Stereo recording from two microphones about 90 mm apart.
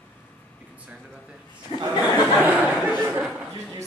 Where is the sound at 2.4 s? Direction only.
15° right (ahead or behind).